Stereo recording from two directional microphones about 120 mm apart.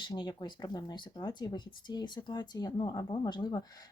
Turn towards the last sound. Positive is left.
turn(degrees=35)  # may be behind; listen again after turning